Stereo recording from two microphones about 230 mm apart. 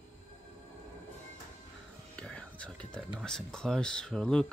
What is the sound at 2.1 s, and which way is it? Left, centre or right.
Whispering, centre.